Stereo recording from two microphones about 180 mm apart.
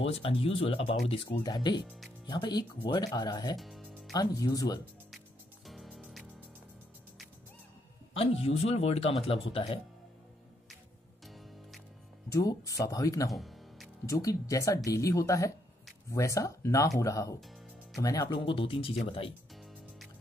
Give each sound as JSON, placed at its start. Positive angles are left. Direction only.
{"t": 0.0, "sound": "speech", "side_deg": 30}
{"t": 3.5, "sound": "music", "side_deg": 0}
{"t": 4.1, "sound": "speech", "side_deg": 20}
{"t": 5.7, "sound": "music", "side_deg": 5}
{"t": 8.1, "sound": "speech", "side_deg": 35}
{"t": 11.2, "sound": "music", "side_deg": 0}
{"t": 12.3, "sound": "speech", "side_deg": 20}
{"t": 13.3, "sound": "music", "side_deg": 0}
{"t": 14.0, "sound": "speech", "side_deg": 20}